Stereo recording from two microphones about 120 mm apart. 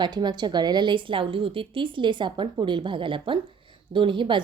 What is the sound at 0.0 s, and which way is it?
A woman's voice, 35° right (ahead or behind).